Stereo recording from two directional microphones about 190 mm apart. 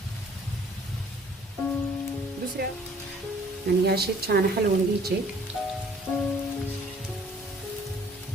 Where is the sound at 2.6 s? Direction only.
55° right (ahead or behind).